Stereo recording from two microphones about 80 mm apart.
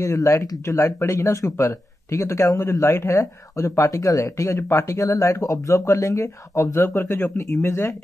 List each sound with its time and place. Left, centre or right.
0.0 s speech: left